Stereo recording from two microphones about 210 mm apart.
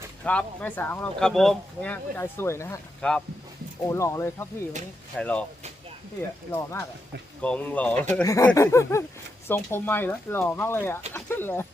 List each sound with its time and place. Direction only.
0.3 s speech: 5° left (ahead or behind)
6.5 s speech: 10° left (ahead or behind)